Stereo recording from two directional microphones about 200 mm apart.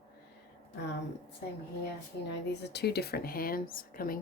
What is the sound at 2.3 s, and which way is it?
Speech, 55° left (ahead or behind).